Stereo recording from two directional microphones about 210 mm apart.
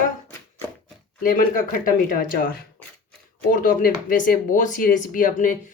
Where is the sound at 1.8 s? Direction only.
40° left (ahead or behind).